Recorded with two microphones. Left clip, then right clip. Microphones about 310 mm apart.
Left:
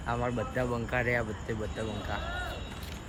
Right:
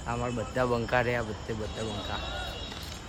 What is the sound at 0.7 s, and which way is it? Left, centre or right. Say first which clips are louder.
Speech: right 5 dB; right.